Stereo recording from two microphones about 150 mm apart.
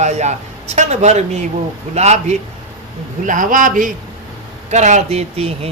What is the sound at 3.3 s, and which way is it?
Speech, 60° right (ahead or behind).